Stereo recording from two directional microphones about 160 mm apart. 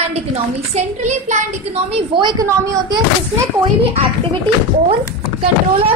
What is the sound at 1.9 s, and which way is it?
Speech, 30° right (ahead or behind).